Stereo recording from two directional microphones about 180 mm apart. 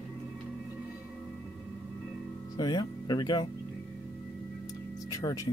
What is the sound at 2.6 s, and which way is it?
Speech, 25° left (ahead or behind).